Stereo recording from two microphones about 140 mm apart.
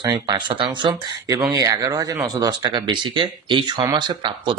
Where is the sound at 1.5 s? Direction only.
25° right (ahead or behind).